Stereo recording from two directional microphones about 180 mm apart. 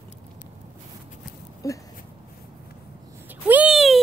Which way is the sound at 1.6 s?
20° left (ahead or behind).